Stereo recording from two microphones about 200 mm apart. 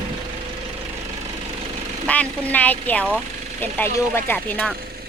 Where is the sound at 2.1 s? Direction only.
5° left (ahead or behind).